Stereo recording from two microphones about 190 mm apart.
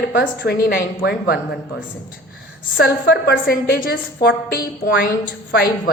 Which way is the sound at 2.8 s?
55° left (ahead or behind).